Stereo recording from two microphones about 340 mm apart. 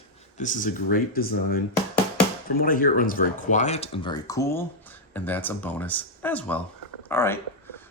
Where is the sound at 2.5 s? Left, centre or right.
Left.